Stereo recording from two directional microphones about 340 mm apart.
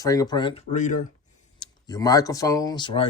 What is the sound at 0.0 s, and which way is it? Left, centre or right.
Speech, centre.